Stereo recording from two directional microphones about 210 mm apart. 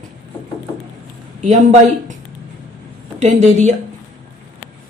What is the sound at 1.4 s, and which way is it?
Speech, 35° right (ahead or behind).